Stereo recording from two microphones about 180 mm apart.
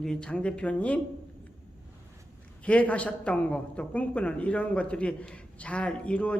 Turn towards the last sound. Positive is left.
turn(degrees=5)  # may be behind; listen again after turning